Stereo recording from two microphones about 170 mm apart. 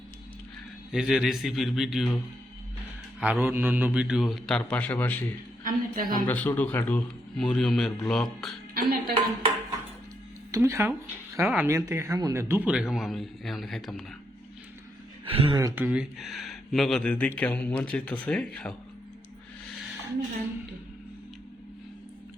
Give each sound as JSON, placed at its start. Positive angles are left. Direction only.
{"t": 0.9, "sound": "speech", "side_deg": 0}
{"t": 3.2, "sound": "speech", "side_deg": -5}
{"t": 5.6, "sound": "a woman's voice", "side_deg": -60}
{"t": 6.2, "sound": "a man's voice", "side_deg": 10}
{"t": 8.7, "sound": "speech", "side_deg": -60}
{"t": 10.5, "sound": "speech", "side_deg": -15}
{"t": 15.2, "sound": "speech", "side_deg": -30}
{"t": 15.5, "sound": "speech", "side_deg": -15}